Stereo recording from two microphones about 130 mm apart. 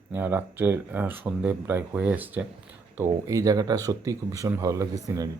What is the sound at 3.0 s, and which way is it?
Speech, 25° right (ahead or behind).